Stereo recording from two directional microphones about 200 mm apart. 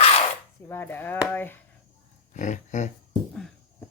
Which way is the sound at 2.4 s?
35° left (ahead or behind).